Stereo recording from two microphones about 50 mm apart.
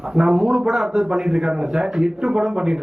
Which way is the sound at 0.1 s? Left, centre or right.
Centre.